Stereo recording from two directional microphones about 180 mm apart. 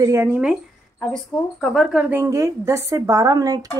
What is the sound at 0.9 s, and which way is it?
A woman's voice, 5° left (ahead or behind).